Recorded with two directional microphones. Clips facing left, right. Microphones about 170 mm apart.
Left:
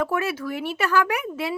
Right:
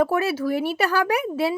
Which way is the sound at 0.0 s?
35° right (ahead or behind).